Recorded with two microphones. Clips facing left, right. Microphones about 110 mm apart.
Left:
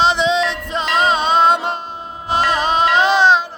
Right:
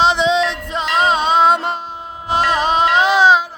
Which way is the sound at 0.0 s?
15° right (ahead or behind).